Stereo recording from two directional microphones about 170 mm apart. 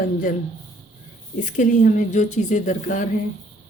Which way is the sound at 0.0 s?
55° left (ahead or behind).